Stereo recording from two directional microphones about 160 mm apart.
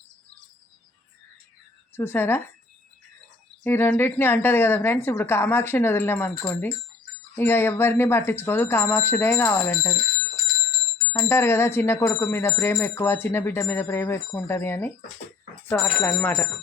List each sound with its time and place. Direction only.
2.0 s speech: 15° left (ahead or behind)
3.6 s speech: 10° left (ahead or behind)
11.1 s speech: 15° left (ahead or behind)